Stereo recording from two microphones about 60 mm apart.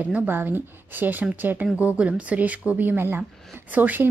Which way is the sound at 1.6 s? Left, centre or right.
Right.